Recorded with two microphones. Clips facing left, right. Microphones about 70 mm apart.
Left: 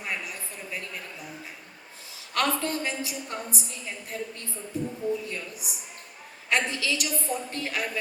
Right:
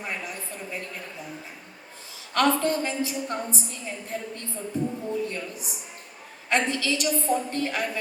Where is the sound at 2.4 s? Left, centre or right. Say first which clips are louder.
Right 5 dB; right.